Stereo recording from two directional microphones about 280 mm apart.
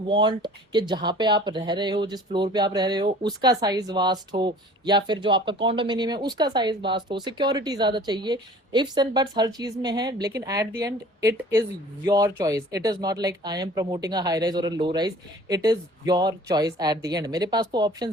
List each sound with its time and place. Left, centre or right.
0.1 s speech: centre